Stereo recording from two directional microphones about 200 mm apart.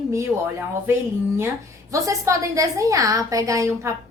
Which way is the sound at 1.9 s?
15° right (ahead or behind).